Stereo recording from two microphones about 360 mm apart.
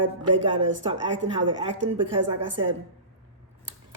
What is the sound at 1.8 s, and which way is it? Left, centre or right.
Speech, right.